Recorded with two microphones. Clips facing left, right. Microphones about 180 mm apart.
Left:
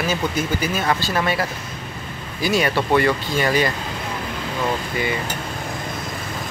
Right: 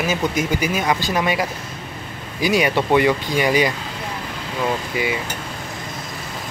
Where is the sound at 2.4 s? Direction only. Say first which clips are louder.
Right 2 dB; 15° right (ahead or behind).